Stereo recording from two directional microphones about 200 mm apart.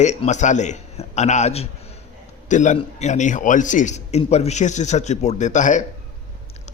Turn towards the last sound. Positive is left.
turn(degrees=40)  # may be behind; listen again after turning